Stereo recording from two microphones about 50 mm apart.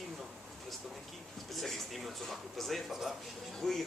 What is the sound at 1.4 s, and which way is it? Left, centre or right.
Speech, centre.